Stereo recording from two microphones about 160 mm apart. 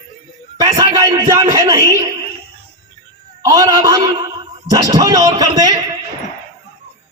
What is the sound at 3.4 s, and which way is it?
A man's voice, 25° right (ahead or behind).